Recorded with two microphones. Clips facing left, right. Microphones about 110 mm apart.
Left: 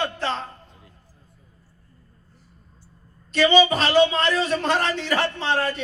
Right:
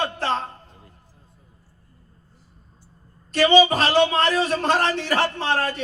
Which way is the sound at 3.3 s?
40° right (ahead or behind).